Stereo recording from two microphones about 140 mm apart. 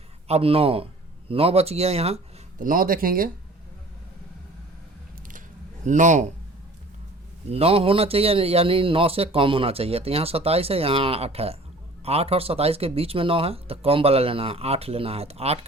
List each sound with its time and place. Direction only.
0.3 s speech: 45° right (ahead or behind)
2.6 s speech: 80° right
5.8 s a man's voice: 60° right (ahead or behind)
7.5 s speech: 45° right (ahead or behind)